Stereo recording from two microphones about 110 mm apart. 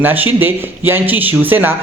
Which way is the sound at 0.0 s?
15° right (ahead or behind).